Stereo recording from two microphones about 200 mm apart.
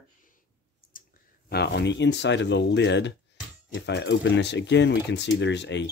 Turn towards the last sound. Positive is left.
turn(degrees=60)  # may be behind; listen again after turning